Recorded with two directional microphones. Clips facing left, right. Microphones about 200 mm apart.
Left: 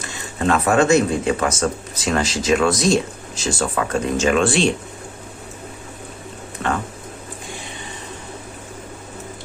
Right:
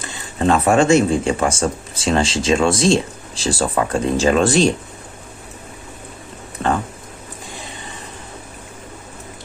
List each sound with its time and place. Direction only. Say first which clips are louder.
0.0 s speech: right 3 dB; 30° right (ahead or behind)